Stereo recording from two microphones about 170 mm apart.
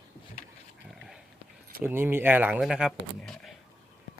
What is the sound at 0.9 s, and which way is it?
Pig, 5° right (ahead or behind).